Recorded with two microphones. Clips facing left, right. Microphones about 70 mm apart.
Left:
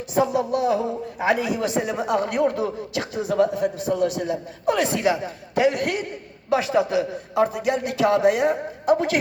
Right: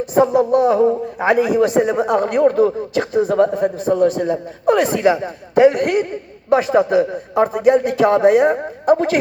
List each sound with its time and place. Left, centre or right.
0.1 s a man's voice: right